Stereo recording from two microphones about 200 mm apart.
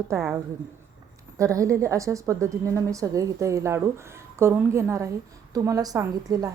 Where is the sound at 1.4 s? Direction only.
15° right (ahead or behind).